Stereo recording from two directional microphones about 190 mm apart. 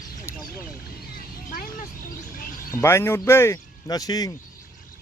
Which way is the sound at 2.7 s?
15° left (ahead or behind).